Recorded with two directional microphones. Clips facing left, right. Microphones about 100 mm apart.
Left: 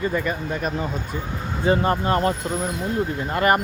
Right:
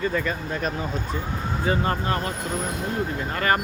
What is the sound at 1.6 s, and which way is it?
Speech, 25° left (ahead or behind).